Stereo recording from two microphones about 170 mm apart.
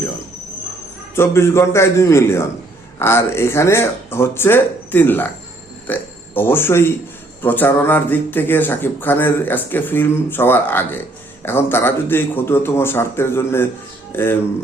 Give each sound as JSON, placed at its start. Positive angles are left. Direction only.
{"t": 1.1, "sound": "a man's voice", "side_deg": 15}